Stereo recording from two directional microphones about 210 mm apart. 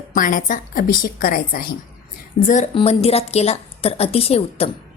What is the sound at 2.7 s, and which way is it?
A woman's voice, 25° left (ahead or behind).